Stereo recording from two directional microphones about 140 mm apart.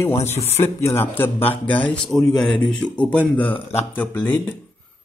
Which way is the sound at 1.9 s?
Centre (ahead or behind).